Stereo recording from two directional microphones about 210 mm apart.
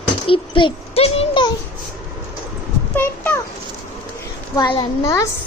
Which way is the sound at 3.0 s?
10° left (ahead or behind).